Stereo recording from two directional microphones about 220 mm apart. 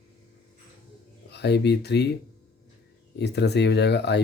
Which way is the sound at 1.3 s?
50° left (ahead or behind).